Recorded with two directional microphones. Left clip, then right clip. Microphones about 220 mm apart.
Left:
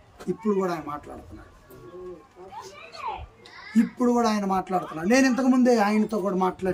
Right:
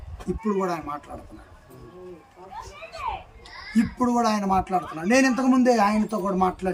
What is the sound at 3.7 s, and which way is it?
Speech, centre (ahead or behind).